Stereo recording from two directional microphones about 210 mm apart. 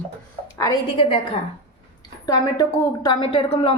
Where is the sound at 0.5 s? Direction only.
15° left (ahead or behind).